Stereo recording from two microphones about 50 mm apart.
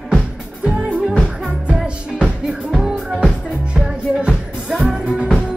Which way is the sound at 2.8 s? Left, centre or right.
Centre.